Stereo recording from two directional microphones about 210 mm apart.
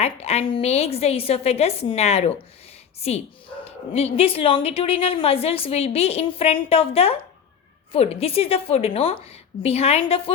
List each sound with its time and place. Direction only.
0.0 s a woman's voice: 30° left (ahead or behind)